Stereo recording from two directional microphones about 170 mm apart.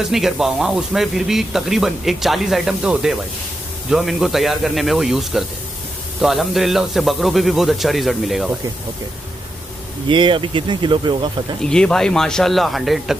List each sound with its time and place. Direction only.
0.0 s speech: centre (ahead or behind)
10.0 s speech: 30° right (ahead or behind)
11.6 s speech: 5° left (ahead or behind)